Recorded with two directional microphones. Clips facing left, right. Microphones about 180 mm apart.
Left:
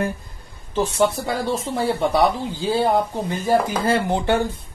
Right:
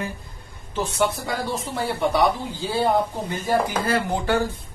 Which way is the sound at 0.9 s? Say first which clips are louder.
Left 3 dB; 30° left (ahead or behind).